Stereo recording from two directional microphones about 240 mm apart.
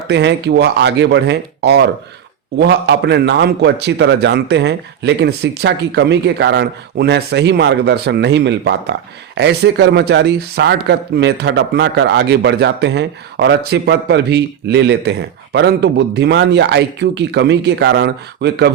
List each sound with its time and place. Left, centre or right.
0.1 s a man's voice: right